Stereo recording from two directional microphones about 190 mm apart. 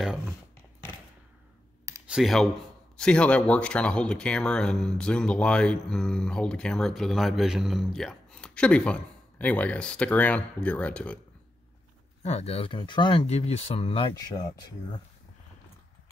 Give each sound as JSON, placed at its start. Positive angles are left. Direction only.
{"t": 2.0, "sound": "speech", "side_deg": 0}
{"t": 12.2, "sound": "speech", "side_deg": 35}